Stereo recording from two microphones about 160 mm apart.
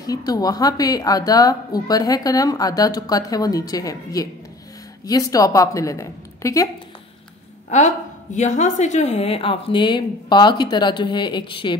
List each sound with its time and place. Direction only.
0.0 s a woman's voice: 25° left (ahead or behind)
7.7 s a woman's voice: 45° left (ahead or behind)